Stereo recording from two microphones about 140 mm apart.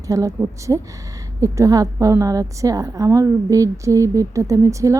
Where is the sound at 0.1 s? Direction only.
25° right (ahead or behind).